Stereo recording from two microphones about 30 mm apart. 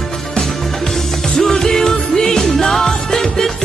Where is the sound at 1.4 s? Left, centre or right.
Centre.